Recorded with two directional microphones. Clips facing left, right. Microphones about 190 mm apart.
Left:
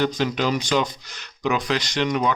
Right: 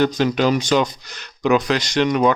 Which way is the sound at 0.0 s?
60° right (ahead or behind).